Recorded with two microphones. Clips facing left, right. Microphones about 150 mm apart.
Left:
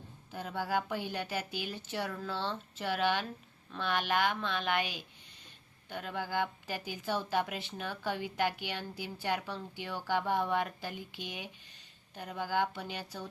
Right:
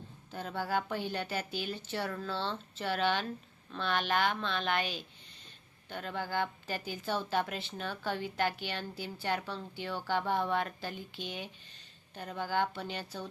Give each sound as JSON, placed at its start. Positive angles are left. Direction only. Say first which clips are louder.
{"t": 0.3, "sound": "speech", "louder": "even", "side_deg": 10}